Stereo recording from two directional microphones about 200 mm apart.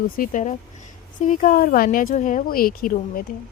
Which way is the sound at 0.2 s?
40° left (ahead or behind).